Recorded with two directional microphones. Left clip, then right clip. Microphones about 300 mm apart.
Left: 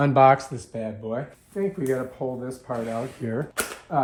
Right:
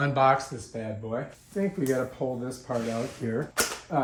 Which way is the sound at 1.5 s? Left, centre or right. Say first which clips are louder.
Left 2 dB; centre.